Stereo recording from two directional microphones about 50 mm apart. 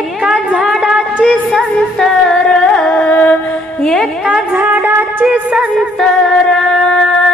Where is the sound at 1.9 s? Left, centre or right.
Centre.